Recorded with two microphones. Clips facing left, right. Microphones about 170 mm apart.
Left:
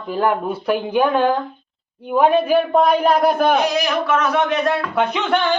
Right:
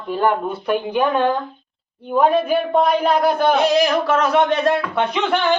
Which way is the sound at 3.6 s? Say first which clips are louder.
Right 3 dB; 30° right (ahead or behind).